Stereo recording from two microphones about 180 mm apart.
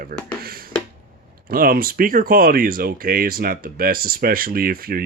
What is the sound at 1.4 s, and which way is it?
Speech, 55° right (ahead or behind).